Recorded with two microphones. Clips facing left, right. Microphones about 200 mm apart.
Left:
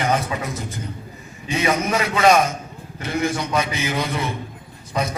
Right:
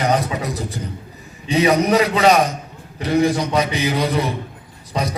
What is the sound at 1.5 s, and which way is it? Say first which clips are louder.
A man's voice: right 6 dB; 35° right (ahead or behind).